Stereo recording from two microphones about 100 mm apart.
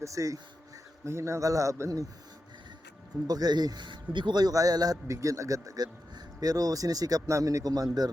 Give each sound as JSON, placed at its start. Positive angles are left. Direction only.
{"t": 0.0, "sound": "a man's voice", "side_deg": -35}
{"t": 3.2, "sound": "a man's voice", "side_deg": -40}